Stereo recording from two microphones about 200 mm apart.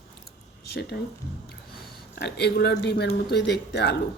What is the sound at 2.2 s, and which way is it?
Speech, 55° left (ahead or behind).